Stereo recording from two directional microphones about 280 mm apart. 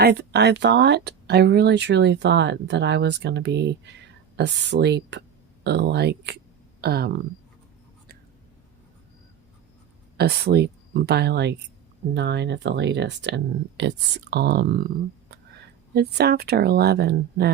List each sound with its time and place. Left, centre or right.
0.0 s speech: right
10.2 s speech: right